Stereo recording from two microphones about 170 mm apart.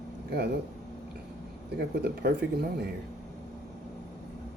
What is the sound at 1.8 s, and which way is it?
Speech, 75° right (ahead or behind).